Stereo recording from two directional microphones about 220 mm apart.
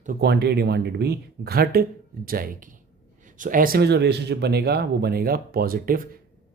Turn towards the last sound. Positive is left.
turn(degrees=-40)  # may be behind; listen again after turning